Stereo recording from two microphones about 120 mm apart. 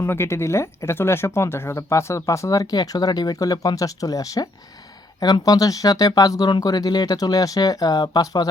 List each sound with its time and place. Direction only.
0.0 s speech: 20° left (ahead or behind)